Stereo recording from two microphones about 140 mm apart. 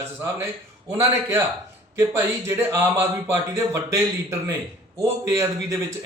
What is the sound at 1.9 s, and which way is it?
A man's voice, 20° right (ahead or behind).